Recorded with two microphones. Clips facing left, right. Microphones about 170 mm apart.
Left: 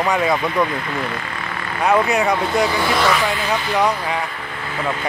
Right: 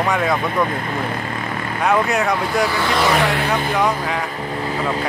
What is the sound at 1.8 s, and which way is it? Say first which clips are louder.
Speech: left 1 dB; centre (ahead or behind).